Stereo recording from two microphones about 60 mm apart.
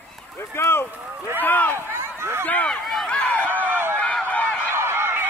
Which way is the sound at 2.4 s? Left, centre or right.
Left.